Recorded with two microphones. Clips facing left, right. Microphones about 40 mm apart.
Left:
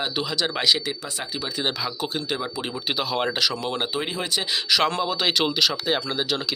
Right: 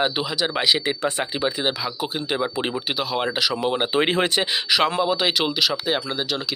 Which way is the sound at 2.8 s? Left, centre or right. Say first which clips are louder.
Right 1 dB; centre.